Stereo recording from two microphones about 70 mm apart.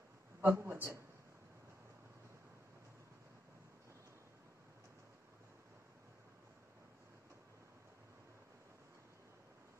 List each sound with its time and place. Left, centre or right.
0.4 s a man's voice: right